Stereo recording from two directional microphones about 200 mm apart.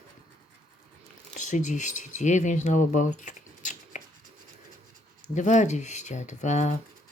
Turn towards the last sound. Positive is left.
turn(degrees=35)  # may be behind; listen again after turning